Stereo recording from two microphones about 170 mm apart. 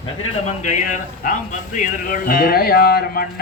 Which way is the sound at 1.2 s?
50° left (ahead or behind).